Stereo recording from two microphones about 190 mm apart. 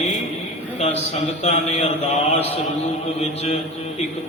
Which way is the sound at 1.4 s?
30° left (ahead or behind).